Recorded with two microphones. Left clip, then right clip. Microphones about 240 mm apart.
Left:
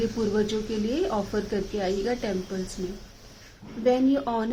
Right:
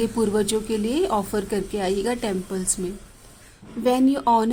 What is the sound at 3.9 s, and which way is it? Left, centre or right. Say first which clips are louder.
Speech: right 4 dB; right.